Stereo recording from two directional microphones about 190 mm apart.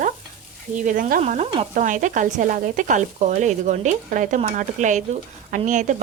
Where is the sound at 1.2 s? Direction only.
35° right (ahead or behind).